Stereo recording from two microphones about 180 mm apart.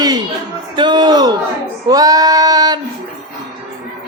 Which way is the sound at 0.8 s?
25° right (ahead or behind).